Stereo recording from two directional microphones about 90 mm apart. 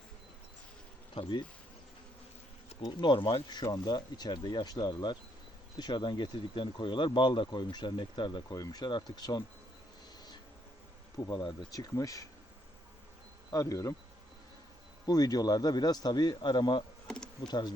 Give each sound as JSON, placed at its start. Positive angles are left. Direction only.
{"t": 1.1, "sound": "speech", "side_deg": 60}
{"t": 2.8, "sound": "speech", "side_deg": 60}
{"t": 5.7, "sound": "speech", "side_deg": 60}
{"t": 8.5, "sound": "speech", "side_deg": 45}
{"t": 11.3, "sound": "speech", "side_deg": 50}
{"t": 13.5, "sound": "speech", "side_deg": 40}
{"t": 15.0, "sound": "speech", "side_deg": 45}
{"t": 17.1, "sound": "bee", "side_deg": 5}